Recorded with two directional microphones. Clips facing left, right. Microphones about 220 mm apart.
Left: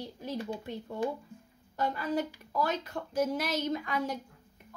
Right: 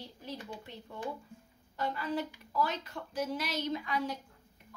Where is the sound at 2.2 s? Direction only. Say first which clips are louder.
Left 2 dB; 45° left (ahead or behind).